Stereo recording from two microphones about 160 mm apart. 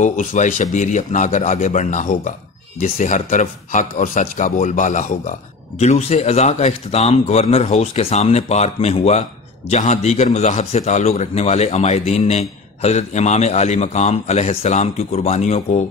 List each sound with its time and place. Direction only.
0.0 s a man's voice: 55° left (ahead or behind)
5.8 s a man's voice: 40° left (ahead or behind)